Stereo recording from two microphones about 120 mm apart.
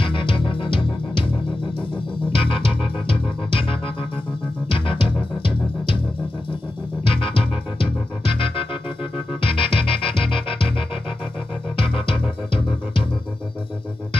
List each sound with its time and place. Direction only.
0.0 s music: 45° left (ahead or behind)
2.3 s music: 50° left (ahead or behind)
7.1 s music: 45° left (ahead or behind)
11.8 s music: 45° left (ahead or behind)